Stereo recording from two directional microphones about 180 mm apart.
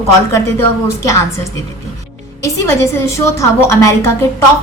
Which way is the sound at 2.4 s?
15° left (ahead or behind).